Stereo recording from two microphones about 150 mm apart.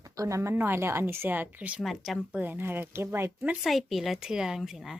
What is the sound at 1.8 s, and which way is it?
Speech, centre (ahead or behind).